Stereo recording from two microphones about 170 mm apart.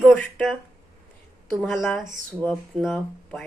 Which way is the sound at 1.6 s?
5° left (ahead or behind).